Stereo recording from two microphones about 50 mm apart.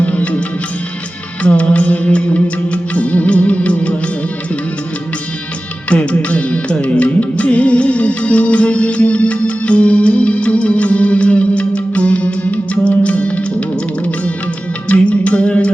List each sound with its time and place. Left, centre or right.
0.0 s music: left
5.9 s music: left